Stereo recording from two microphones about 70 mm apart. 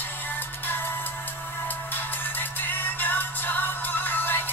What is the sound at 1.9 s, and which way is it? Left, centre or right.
Music, left.